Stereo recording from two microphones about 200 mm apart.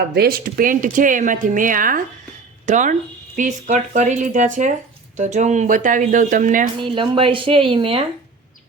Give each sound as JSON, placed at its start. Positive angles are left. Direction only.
{"t": 0.1, "sound": "speech", "side_deg": -50}
{"t": 6.8, "sound": "speech", "side_deg": -25}